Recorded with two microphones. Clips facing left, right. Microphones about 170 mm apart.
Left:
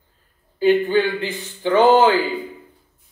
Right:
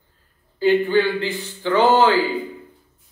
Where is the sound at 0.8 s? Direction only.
15° left (ahead or behind).